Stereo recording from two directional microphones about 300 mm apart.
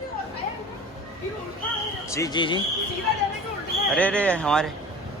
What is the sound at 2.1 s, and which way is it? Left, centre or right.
Speech, centre.